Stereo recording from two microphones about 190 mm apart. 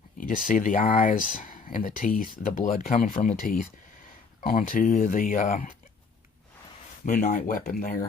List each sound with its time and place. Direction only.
0.2 s speech: 45° left (ahead or behind)
7.0 s speech: 40° left (ahead or behind)